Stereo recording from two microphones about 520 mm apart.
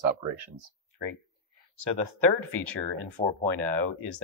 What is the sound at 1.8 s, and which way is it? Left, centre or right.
Speech, right.